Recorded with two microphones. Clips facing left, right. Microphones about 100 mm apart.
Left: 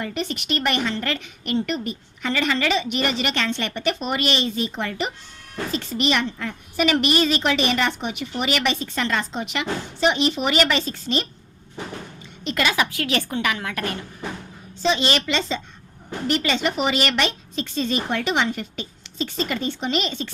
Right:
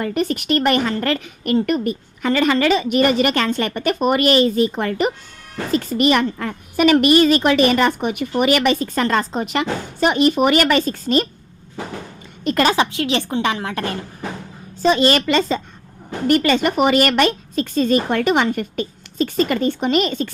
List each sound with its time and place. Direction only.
0.0 s a woman's voice: 45° right (ahead or behind)
12.5 s a woman's voice: 40° right (ahead or behind)
12.7 s a woman's voice: 25° right (ahead or behind)
14.8 s a woman's voice: 50° right (ahead or behind)